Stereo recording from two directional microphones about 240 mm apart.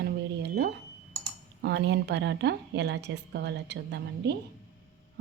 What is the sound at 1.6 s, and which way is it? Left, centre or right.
A woman's voice, right.